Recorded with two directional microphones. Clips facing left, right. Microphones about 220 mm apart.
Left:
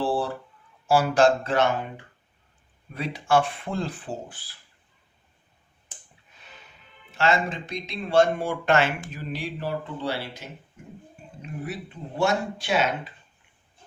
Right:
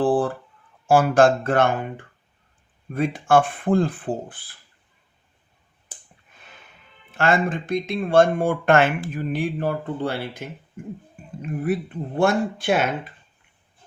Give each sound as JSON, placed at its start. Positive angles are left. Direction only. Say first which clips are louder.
{"t": 0.0, "sound": "a sound", "louder": "right 6 dB", "side_deg": -50}
{"t": 0.9, "sound": "speech", "louder": "right 3 dB", "side_deg": -50}
{"t": 7.1, "sound": "speech", "louder": "right 3 dB", "side_deg": -50}